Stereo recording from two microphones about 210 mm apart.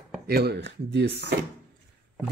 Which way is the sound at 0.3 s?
50° right (ahead or behind).